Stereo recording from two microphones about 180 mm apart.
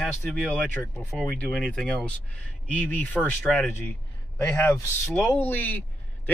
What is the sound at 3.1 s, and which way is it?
A man's voice, 5° left (ahead or behind).